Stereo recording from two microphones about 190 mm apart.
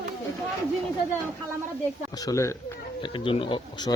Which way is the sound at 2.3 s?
20° left (ahead or behind).